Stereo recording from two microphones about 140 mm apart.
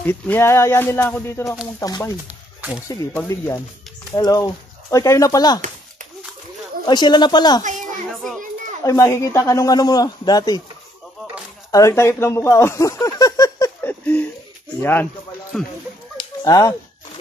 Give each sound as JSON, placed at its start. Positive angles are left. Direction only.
{"t": 0.0, "sound": "speech", "side_deg": 15}
{"t": 1.8, "sound": "a man's voice", "side_deg": 25}
{"t": 2.2, "sound": "a sound", "side_deg": -10}
{"t": 3.3, "sound": "a man's voice", "side_deg": 25}
{"t": 6.9, "sound": "speech", "side_deg": 30}
{"t": 8.1, "sound": "children playing", "side_deg": 0}
{"t": 8.8, "sound": "a man's voice", "side_deg": 20}
{"t": 11.7, "sound": "speech", "side_deg": 20}
{"t": 13.8, "sound": "a sound", "side_deg": 15}
{"t": 14.8, "sound": "speech", "side_deg": 15}
{"t": 15.5, "sound": "speech", "side_deg": 0}
{"t": 16.2, "sound": "a sound", "side_deg": 25}